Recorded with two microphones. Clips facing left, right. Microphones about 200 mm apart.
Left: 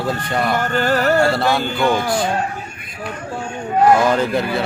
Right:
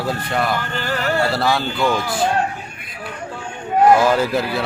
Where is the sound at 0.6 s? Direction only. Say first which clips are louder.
Left 6 dB; 50° left (ahead or behind).